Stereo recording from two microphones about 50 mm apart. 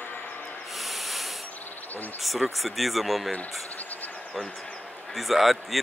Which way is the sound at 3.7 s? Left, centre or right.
Left.